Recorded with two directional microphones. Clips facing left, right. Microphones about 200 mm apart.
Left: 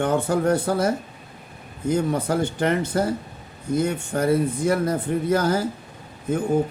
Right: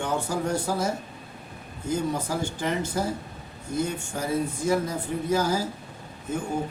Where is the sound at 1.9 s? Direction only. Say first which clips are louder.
Left 5 dB; 60° left (ahead or behind).